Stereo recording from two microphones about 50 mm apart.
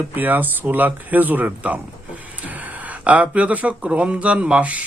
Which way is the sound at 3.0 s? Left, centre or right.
Right.